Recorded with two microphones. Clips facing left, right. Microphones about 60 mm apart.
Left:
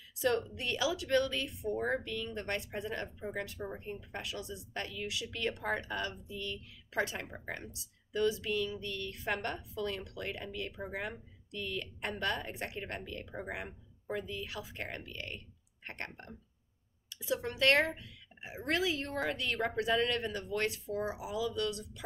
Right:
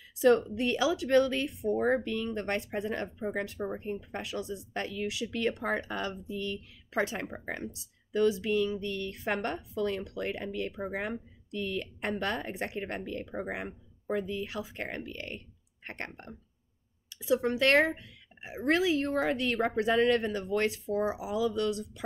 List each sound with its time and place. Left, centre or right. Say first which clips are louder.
0.2 s speech: right 8 dB; right
17.3 s speech: right 4 dB; right